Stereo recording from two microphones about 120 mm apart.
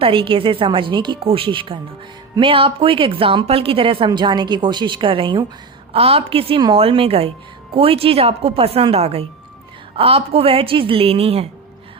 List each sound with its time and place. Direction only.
0.0 s a woman's voice: 45° right (ahead or behind)
5.9 s a woman's voice: 55° right (ahead or behind)